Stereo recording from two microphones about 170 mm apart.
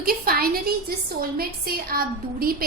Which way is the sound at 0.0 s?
60° right (ahead or behind).